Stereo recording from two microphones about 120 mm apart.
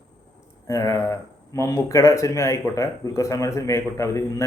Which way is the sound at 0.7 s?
25° left (ahead or behind).